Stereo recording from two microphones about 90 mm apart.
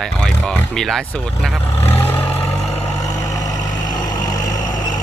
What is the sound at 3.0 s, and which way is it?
Vehicle, 40° left (ahead or behind).